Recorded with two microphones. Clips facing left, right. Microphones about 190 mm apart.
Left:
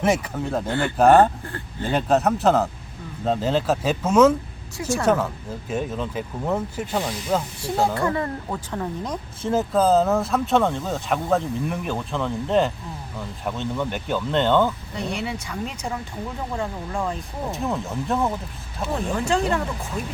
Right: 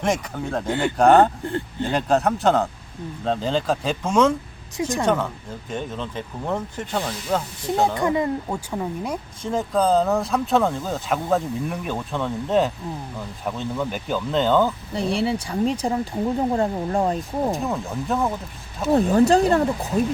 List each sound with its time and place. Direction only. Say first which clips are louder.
0.0 s speech: left 2 dB; 5° left (ahead or behind)
7.9 s speech: right 3 dB; 15° right (ahead or behind)
9.4 s speech: left 2 dB; 5° left (ahead or behind)
14.9 s speech: right 6 dB; 30° right (ahead or behind)
17.2 s speech: right 5 dB; centre (ahead or behind)
19.1 s speech: right 5 dB; 35° right (ahead or behind)